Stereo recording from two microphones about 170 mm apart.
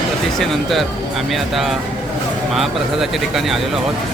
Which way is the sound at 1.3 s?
Centre (ahead or behind).